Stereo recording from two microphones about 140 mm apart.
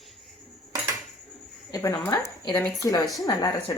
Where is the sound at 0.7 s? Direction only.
20° right (ahead or behind).